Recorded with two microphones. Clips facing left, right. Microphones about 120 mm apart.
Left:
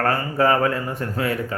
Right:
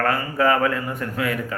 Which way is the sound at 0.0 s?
35° left (ahead or behind).